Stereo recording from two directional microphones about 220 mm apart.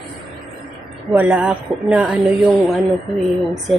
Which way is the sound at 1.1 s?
5° right (ahead or behind).